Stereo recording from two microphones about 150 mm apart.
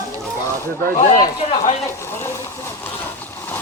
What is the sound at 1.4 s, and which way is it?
Speech, 45° left (ahead or behind).